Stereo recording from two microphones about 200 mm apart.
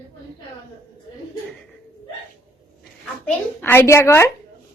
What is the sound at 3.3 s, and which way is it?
A child's voice, 10° left (ahead or behind).